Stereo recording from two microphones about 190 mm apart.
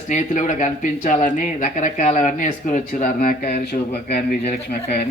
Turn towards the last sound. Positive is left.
turn(degrees=50)  # may be behind; listen again after turning